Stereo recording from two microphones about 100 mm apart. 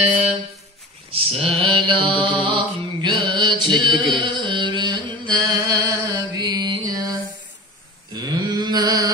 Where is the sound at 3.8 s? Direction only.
50° right (ahead or behind).